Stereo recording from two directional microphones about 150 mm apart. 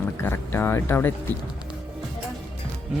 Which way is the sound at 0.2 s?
15° left (ahead or behind).